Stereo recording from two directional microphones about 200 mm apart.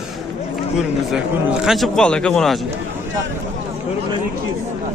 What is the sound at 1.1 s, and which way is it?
A man's voice, centre (ahead or behind).